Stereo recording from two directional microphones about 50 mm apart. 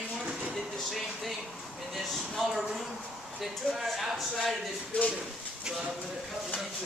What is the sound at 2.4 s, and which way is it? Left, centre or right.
Speech, centre.